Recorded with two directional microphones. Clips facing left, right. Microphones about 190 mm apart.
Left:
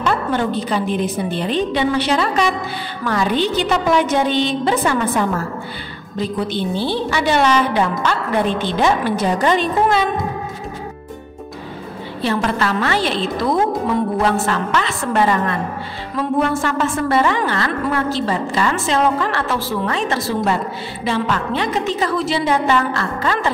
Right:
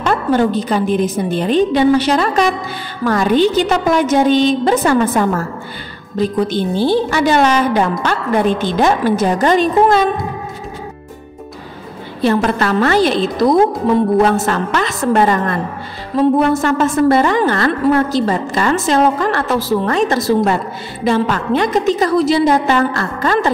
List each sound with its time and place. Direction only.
0.0 s a woman's voice: 45° right (ahead or behind)
12.2 s a woman's voice: 45° right (ahead or behind)